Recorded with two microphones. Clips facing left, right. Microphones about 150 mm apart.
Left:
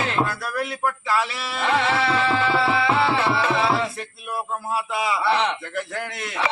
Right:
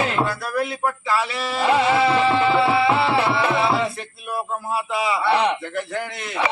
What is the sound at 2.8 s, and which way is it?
Music, 5° right (ahead or behind).